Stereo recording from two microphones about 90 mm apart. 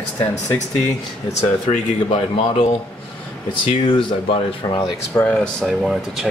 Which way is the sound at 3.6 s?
80° left.